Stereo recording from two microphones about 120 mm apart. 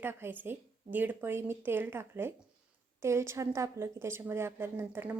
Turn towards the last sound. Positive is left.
turn(degrees=-15)  # may be behind; listen again after turning